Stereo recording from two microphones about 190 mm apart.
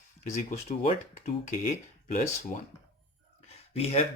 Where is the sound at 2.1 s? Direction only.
40° left (ahead or behind).